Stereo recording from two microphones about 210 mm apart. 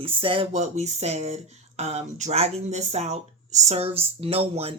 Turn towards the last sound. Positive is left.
turn(degrees=-30)  # may be behind; listen again after turning